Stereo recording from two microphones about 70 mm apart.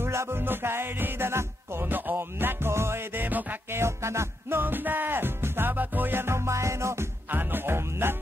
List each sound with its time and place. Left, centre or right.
0.0 s music: right
3.3 s music: right
3.7 s music: right
7.2 s music: right